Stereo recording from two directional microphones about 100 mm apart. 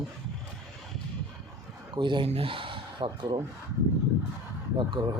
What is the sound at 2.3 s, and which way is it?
Speech, 65° right (ahead or behind).